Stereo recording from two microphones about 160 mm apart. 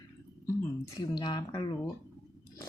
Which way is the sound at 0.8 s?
30° left (ahead or behind).